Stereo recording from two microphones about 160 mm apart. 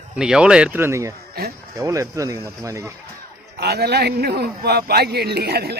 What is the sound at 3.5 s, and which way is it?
A man's voice, 85° right.